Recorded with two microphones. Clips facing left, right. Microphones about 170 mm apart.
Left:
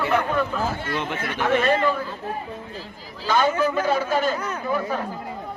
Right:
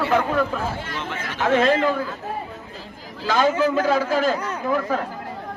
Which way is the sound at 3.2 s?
90° right.